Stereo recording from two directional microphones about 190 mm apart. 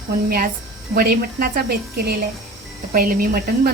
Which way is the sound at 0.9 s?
55° right (ahead or behind).